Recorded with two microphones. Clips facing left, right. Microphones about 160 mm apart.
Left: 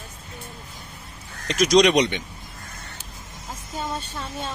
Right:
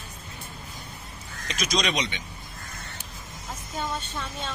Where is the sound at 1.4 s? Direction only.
70° left (ahead or behind).